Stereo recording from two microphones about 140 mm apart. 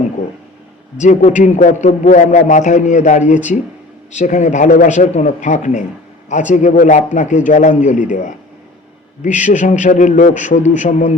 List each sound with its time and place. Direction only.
0.9 s a man's voice: 60° left (ahead or behind)
9.2 s a man's voice: 60° left (ahead or behind)